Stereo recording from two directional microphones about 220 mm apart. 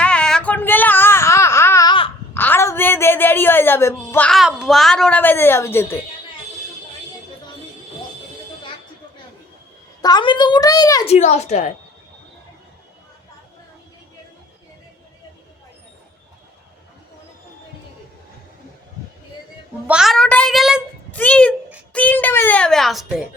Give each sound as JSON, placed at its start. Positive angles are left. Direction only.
{"t": 0.0, "sound": "a sound", "side_deg": 5}
{"t": 2.3, "sound": "a woman's voice", "side_deg": 10}
{"t": 10.0, "sound": "a woman's voice", "side_deg": 20}
{"t": 11.0, "sound": "speech", "side_deg": 30}
{"t": 19.9, "sound": "a child's voice", "side_deg": 0}